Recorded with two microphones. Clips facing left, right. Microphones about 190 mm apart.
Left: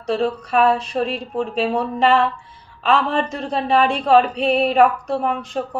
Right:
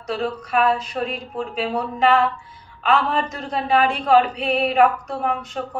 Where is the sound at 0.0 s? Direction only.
30° left (ahead or behind).